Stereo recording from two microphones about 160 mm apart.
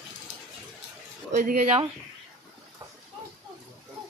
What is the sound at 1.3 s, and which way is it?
Speech, 55° right (ahead or behind).